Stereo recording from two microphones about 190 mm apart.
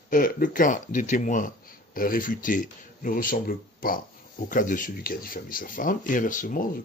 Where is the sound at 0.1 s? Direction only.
45° left (ahead or behind).